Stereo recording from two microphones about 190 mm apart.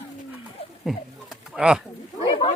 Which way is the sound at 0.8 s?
Centre (ahead or behind).